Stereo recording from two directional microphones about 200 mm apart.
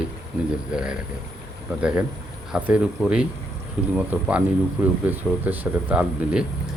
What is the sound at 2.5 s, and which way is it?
Speech, 5° right (ahead or behind).